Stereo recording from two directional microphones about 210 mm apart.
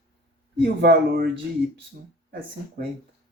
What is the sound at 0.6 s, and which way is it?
Speech, 45° right (ahead or behind).